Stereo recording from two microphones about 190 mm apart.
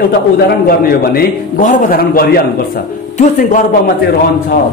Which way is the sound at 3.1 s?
45° left (ahead or behind).